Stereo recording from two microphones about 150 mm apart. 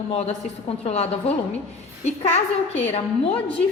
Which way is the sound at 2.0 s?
45° left (ahead or behind).